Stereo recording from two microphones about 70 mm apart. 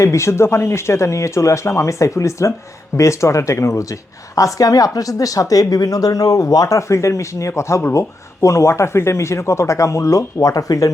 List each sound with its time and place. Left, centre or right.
0.0 s speech: left